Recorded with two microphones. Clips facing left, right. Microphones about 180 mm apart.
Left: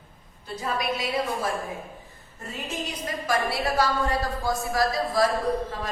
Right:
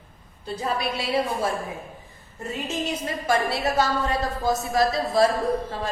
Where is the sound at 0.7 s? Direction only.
30° right (ahead or behind).